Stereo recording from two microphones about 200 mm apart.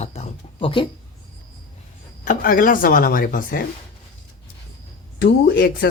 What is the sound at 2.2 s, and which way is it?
Speech, 40° left (ahead or behind).